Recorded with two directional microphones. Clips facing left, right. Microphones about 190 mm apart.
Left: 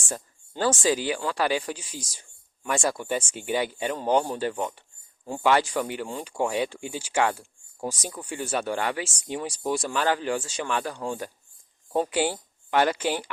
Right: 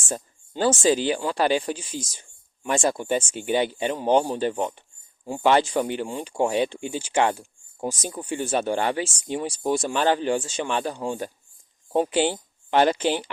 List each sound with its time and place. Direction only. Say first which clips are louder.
0.1 s speech: right 4 dB; 25° right (ahead or behind)
10.9 s speech: right 3 dB; 15° right (ahead or behind)